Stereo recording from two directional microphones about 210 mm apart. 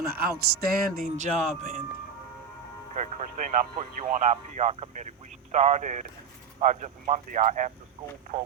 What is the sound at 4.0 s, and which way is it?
Speech, 35° right (ahead or behind).